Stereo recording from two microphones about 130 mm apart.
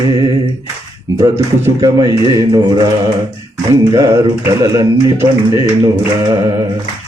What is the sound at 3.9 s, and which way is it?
Music, 25° right (ahead or behind).